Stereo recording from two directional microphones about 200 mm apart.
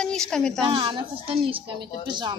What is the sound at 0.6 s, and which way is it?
A woman's voice, 25° right (ahead or behind).